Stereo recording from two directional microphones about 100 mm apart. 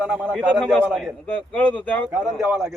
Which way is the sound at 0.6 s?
10° left (ahead or behind).